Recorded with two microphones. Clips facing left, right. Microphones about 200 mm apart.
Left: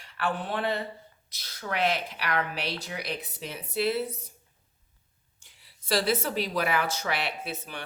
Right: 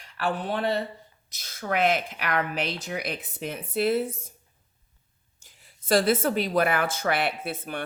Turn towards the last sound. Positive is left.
turn(degrees=-50)  # may be behind; listen again after turning